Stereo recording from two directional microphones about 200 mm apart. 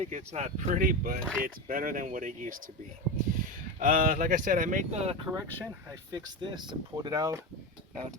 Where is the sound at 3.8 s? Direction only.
45° right (ahead or behind).